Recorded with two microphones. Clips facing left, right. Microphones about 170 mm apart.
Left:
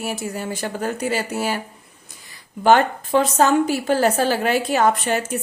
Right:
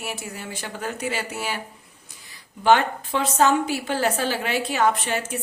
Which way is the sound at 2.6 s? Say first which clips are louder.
Left 3 dB; 45° left (ahead or behind).